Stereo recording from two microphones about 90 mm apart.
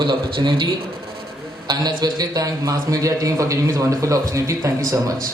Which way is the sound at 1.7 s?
50° right (ahead or behind).